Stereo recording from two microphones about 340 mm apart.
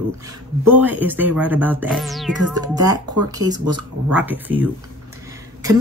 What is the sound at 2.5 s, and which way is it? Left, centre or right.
Speech, centre.